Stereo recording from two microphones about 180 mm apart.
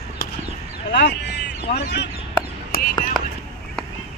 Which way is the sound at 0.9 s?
65° left (ahead or behind).